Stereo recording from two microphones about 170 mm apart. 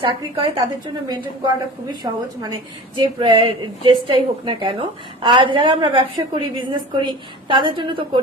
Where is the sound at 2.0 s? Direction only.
25° right (ahead or behind).